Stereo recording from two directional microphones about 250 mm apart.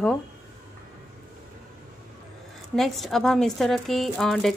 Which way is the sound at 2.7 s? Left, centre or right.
Centre.